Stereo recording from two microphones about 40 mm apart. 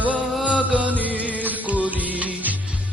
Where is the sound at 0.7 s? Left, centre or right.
Right.